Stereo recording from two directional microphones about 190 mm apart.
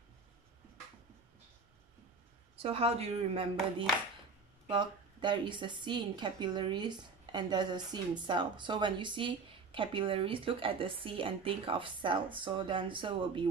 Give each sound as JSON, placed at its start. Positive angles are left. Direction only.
{"t": 2.5, "sound": "a woman's voice", "side_deg": -30}